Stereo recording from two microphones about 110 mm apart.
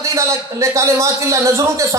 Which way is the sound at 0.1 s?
30° right (ahead or behind).